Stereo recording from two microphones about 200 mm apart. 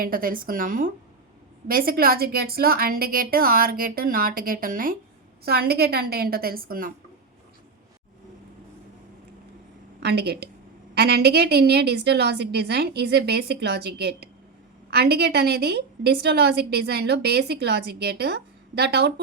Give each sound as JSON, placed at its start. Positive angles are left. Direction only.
{"t": 0.0, "sound": "a woman's voice", "side_deg": -45}
{"t": 10.0, "sound": "a woman's voice", "side_deg": -55}